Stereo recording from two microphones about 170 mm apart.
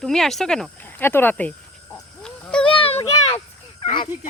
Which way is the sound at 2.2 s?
5° left (ahead or behind).